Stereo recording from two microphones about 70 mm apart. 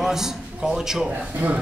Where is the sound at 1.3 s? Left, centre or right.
Right.